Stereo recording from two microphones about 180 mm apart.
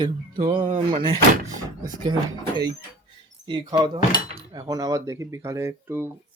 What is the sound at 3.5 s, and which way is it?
Speech, 20° right (ahead or behind).